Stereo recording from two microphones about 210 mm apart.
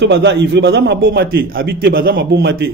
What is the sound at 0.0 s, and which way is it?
A man's voice, 55° right (ahead or behind).